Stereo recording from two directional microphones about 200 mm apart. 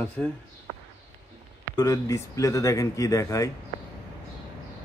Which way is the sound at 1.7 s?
15° left (ahead or behind).